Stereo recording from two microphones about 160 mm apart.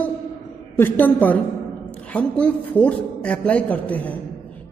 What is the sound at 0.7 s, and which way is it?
A woman's voice, 10° left (ahead or behind).